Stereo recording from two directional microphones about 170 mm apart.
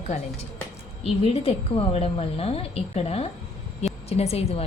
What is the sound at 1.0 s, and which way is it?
A woman's voice, 35° left (ahead or behind).